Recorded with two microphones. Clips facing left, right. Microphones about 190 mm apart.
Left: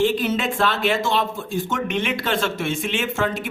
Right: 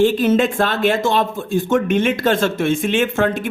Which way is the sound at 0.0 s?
50° right (ahead or behind).